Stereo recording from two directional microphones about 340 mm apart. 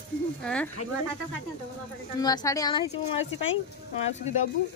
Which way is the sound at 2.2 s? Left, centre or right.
Centre.